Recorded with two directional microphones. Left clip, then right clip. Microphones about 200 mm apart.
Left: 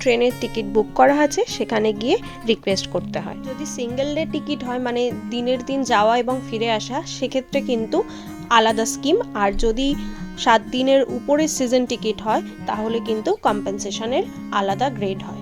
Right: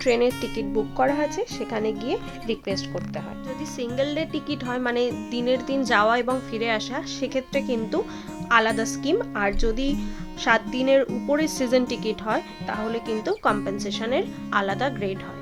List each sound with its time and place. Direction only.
0.0 s speech: 10° left (ahead or behind)
0.9 s speech: 30° left (ahead or behind)
3.6 s speech: 15° left (ahead or behind)